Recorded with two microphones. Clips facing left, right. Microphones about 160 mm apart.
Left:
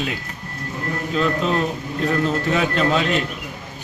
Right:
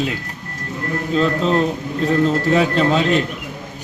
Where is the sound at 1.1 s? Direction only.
30° right (ahead or behind).